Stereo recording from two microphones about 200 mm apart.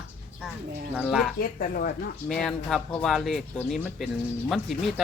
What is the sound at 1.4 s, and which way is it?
Speech, 45° left (ahead or behind).